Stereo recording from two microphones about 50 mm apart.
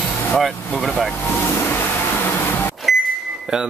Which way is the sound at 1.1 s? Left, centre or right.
Left.